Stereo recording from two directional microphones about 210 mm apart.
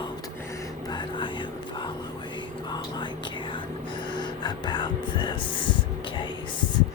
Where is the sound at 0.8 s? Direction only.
20° left (ahead or behind).